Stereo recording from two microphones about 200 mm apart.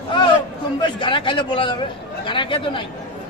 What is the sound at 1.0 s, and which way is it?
Speech, 25° left (ahead or behind).